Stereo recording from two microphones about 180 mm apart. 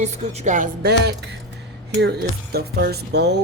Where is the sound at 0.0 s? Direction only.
40° right (ahead or behind).